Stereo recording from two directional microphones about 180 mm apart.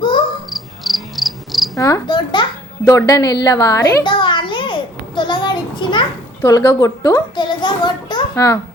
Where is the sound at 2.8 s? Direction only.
20° left (ahead or behind).